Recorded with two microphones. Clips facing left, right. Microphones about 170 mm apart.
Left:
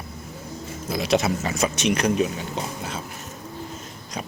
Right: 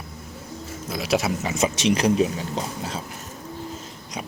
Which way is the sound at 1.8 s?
30° right (ahead or behind).